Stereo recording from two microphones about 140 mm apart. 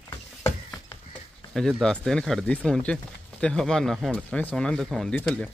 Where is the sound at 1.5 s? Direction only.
5° left (ahead or behind).